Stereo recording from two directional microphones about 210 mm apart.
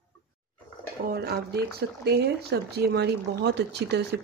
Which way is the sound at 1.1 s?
50° right (ahead or behind).